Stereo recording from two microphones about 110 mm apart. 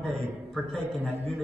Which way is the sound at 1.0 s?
70° right (ahead or behind).